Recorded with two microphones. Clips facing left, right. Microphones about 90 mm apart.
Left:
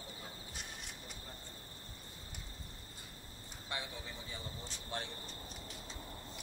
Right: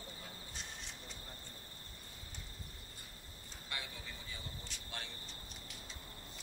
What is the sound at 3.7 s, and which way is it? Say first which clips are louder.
Speech: left 3 dB; 25° left (ahead or behind).